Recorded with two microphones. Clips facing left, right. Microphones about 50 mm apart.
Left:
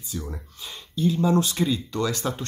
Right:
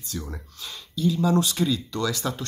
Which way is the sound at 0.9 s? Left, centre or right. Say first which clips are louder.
Left 1 dB; left.